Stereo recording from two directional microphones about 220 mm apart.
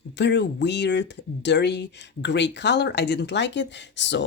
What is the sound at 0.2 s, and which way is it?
Speech, 55° left (ahead or behind).